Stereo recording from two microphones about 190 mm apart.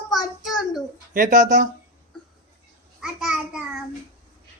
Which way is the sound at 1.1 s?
45° right (ahead or behind).